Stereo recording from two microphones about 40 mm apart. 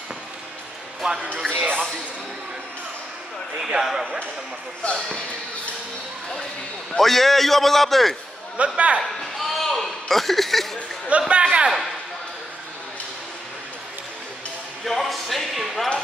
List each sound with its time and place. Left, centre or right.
1.7 s speech: left
3.6 s speech: centre
4.9 s speech: left
7.0 s a man's voice: centre
8.5 s a man's voice: right
9.4 s a sound: centre
11.1 s a man's voice: right
14.9 s a man's voice: centre